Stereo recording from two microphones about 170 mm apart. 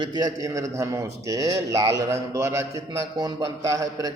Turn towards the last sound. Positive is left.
turn(degrees=-20)  # may be behind; listen again after turning